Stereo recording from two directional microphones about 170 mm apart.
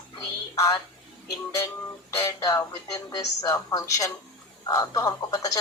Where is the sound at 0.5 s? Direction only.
20° left (ahead or behind).